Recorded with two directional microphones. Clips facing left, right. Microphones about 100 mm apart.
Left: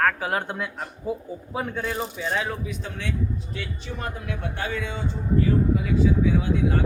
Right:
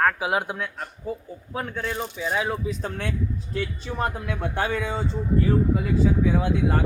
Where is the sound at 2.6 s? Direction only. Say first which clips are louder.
Right 3 dB; 45° right (ahead or behind).